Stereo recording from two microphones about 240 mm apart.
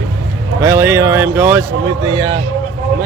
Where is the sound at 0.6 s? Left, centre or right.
Centre.